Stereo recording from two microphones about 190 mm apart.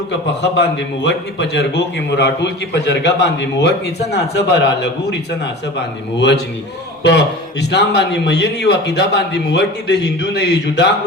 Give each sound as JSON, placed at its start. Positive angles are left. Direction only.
{"t": 0.5, "sound": "a man's voice", "side_deg": 65}
{"t": 6.1, "sound": "a man's voice", "side_deg": 65}